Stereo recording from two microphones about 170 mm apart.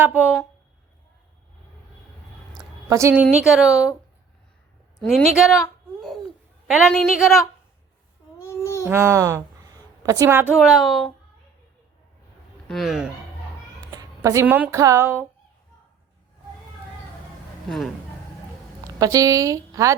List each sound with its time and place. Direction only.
0.0 s a sound: 5° right (ahead or behind)
2.6 s a sound: 15° right (ahead or behind)
3.4 s speech: centre (ahead or behind)
4.9 s speech: centre (ahead or behind)
6.7 s speech: centre (ahead or behind)
8.4 s babbling: 15° left (ahead or behind)
8.9 s a woman's voice: 15° right (ahead or behind)
10.6 s speech: centre (ahead or behind)
12.6 s speech: centre (ahead or behind)
13.9 s cat: 20° right (ahead or behind)
14.4 s a sound: 10° right (ahead or behind)
14.7 s a sound: 20° right (ahead or behind)
17.7 s speech: centre (ahead or behind)
18.9 s a woman's voice: 20° right (ahead or behind)